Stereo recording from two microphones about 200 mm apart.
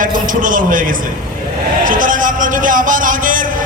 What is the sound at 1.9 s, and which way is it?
A man's voice, 40° right (ahead or behind).